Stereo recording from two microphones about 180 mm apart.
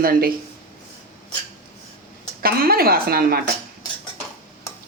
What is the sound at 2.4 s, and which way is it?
Speech, 55° right (ahead or behind).